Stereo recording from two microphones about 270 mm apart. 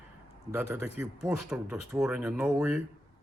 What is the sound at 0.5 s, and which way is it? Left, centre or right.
Speech, centre.